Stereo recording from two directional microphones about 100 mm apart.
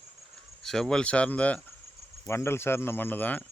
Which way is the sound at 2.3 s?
25° left (ahead or behind).